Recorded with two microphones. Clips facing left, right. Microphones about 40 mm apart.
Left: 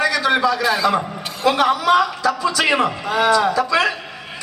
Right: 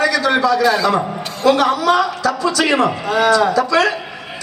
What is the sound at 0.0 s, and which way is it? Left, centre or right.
A man's voice, centre.